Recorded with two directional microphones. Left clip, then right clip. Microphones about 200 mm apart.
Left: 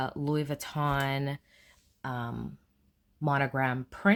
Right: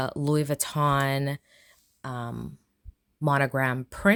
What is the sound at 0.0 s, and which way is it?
Speech, 45° right (ahead or behind).